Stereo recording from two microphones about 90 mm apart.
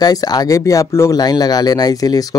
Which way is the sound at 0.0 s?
45° left (ahead or behind).